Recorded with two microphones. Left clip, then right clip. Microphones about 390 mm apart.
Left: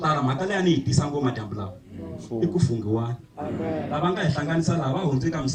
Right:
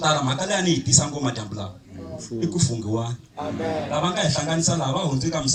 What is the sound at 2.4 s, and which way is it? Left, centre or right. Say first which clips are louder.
Speech: left 1 dB; centre.